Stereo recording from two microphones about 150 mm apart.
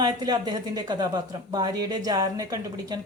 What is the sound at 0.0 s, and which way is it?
Speech, 25° right (ahead or behind).